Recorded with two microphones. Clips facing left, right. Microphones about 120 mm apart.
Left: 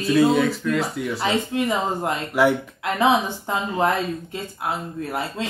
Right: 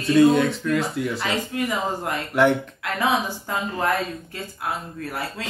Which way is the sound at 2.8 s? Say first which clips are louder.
Left 4 dB; 25° left (ahead or behind).